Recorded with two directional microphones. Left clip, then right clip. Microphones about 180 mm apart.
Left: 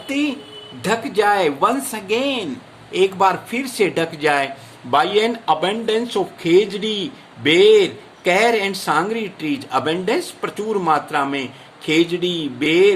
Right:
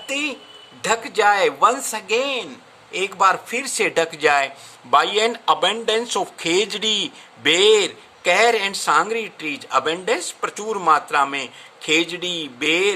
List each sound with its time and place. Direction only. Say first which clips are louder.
0.1 s speech: left 2 dB; 25° right (ahead or behind)